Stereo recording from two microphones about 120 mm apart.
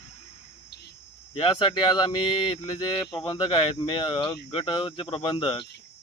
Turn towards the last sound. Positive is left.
turn(degrees=45)  # may be behind; listen again after turning